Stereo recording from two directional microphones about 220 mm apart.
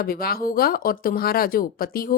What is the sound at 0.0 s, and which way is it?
A woman's voice, 45° left (ahead or behind).